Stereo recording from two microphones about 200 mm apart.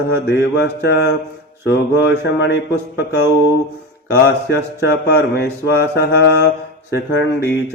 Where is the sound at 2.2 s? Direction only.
60° left (ahead or behind).